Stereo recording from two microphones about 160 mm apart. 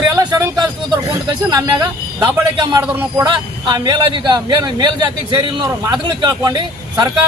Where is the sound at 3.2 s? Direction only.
25° right (ahead or behind).